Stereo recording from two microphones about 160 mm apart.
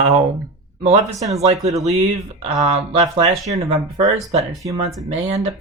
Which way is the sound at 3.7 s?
25° right (ahead or behind).